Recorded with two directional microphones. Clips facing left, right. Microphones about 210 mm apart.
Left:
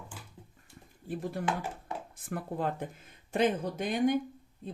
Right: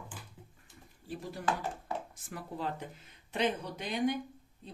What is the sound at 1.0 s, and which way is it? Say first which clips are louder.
Speech: left 2 dB; 55° left (ahead or behind).